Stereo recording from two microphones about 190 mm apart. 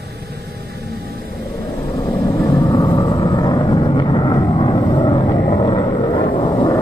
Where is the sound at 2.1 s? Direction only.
15° left (ahead or behind).